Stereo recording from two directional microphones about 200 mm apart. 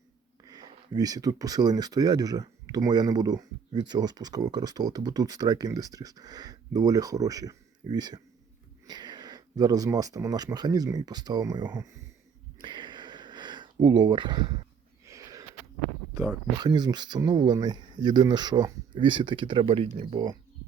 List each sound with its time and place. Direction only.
0.4 s speech: 20° right (ahead or behind)
12.5 s a sound: 25° right (ahead or behind)
16.1 s speech: 20° right (ahead or behind)